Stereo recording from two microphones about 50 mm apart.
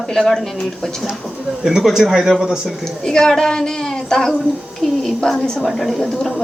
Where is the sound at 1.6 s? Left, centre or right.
Centre.